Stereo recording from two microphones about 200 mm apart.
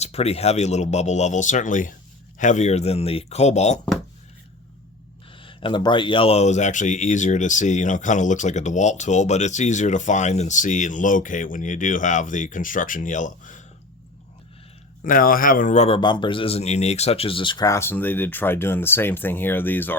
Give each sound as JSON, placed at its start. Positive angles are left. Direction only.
{"t": 0.0, "sound": "speech", "side_deg": 30}
{"t": 5.4, "sound": "speech", "side_deg": 25}
{"t": 15.0, "sound": "a man's voice", "side_deg": 45}